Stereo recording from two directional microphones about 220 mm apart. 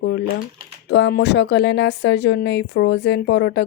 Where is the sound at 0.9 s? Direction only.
50° left (ahead or behind).